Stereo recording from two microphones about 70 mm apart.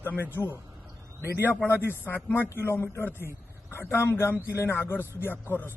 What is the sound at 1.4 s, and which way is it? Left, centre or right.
A man's voice, left.